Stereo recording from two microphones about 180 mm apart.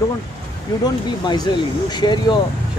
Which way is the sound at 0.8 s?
25° left (ahead or behind).